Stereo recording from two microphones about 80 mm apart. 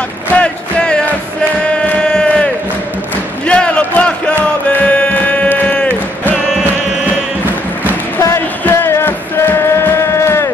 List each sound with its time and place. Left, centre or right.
0.3 s a sound: centre
4.6 s music: centre
8.6 s music: left